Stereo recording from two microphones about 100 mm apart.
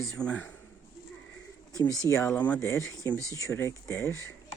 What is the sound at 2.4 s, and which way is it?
Speech, 15° left (ahead or behind).